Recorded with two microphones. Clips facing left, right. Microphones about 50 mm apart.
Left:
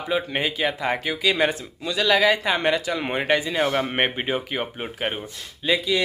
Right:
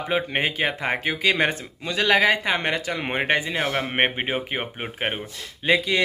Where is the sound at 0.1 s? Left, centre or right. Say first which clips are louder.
Even; right.